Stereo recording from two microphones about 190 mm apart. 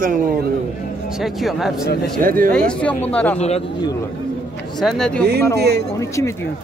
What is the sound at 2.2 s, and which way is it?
Speech, 50° right (ahead or behind).